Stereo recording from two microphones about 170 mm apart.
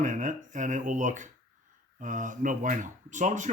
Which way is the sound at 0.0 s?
45° right (ahead or behind).